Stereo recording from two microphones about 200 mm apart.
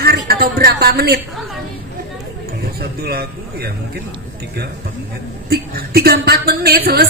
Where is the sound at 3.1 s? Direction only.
50° right (ahead or behind).